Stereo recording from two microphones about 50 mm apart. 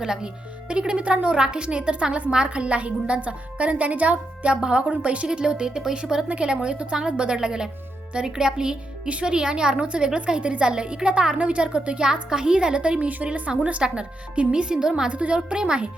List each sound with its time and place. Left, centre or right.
0.0 s a woman's voice: centre